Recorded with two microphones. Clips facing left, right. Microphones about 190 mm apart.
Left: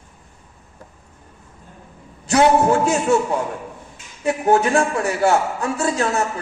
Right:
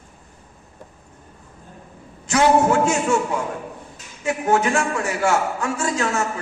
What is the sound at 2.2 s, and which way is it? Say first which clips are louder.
A man's voice: left 2 dB; 35° left (ahead or behind).